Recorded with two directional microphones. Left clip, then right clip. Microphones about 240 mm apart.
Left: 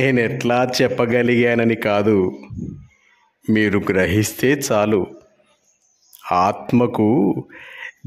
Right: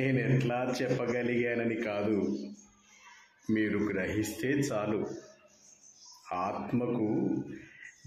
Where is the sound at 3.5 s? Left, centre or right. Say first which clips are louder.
Left 13 dB; left.